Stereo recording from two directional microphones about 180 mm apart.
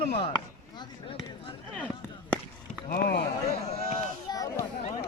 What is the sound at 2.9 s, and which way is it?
Speech, 55° left (ahead or behind).